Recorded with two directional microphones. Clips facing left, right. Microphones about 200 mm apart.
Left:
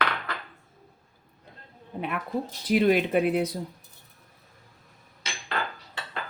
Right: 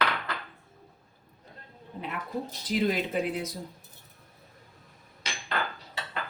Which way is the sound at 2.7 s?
65° left (ahead or behind).